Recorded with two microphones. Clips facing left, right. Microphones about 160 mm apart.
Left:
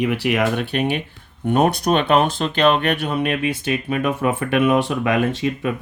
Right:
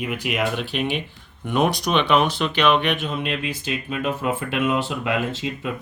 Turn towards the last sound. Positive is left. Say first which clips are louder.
# left 6 dB
turn(degrees=70)  # may be behind; listen again after turning